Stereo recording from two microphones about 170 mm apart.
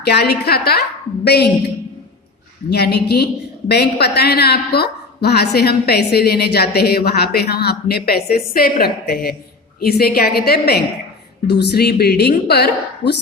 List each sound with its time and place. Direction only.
0.0 s a woman's voice: 70° left (ahead or behind)
2.6 s a woman's voice: 70° left (ahead or behind)